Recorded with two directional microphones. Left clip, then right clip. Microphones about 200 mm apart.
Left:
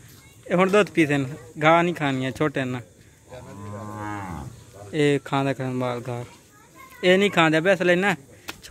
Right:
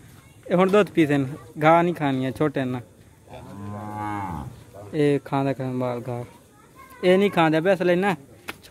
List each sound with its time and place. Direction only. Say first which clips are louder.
0.5 s a man's voice: even; 5° right (ahead or behind)
4.0 s cattle: right 4 dB; 50° right (ahead or behind)
4.9 s a man's voice: even; centre (ahead or behind)